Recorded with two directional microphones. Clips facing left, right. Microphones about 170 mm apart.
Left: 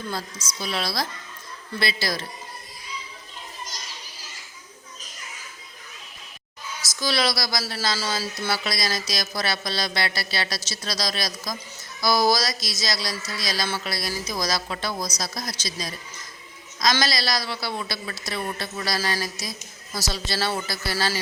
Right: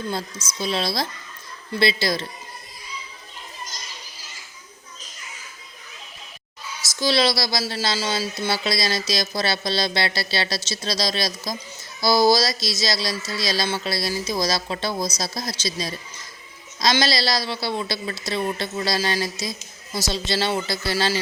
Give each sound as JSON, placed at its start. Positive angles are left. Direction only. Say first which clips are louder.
{"t": 0.4, "sound": "speech", "louder": "right 4 dB", "side_deg": -25}
{"t": 7.0, "sound": "speech", "louder": "right 4 dB", "side_deg": -25}